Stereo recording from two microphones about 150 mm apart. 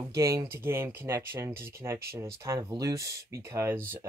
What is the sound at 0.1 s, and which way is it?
Speech, 20° right (ahead or behind).